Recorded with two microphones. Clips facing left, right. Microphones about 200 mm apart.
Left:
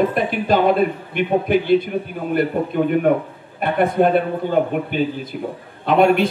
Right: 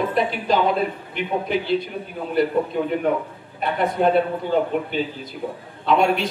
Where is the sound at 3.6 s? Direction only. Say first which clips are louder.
Left 5 dB; 55° left (ahead or behind).